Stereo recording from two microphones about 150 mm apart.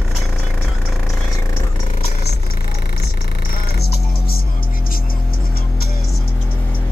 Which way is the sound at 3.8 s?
90° left.